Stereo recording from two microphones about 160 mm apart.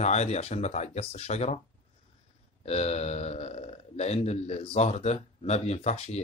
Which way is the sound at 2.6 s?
40° left (ahead or behind).